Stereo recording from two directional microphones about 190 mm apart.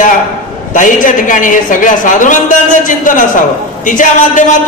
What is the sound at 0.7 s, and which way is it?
A woman's voice, 45° left (ahead or behind).